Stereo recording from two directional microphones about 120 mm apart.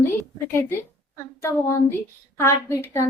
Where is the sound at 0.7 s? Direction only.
20° left (ahead or behind).